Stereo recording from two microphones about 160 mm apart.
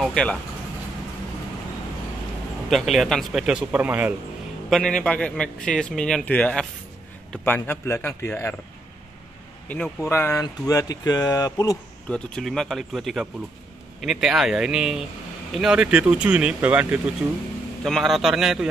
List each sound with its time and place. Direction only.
0.0 s speech: 5° left (ahead or behind)
2.7 s speech: centre (ahead or behind)
4.6 s a man's voice: 5° left (ahead or behind)
10.0 s a man's voice: 15° left (ahead or behind)
12.1 s speech: 5° left (ahead or behind)
17.8 s speech: centre (ahead or behind)